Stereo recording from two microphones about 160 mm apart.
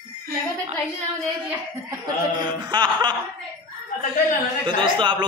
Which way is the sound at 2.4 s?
30° right (ahead or behind).